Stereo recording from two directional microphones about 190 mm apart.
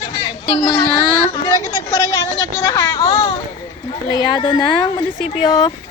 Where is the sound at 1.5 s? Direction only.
15° left (ahead or behind).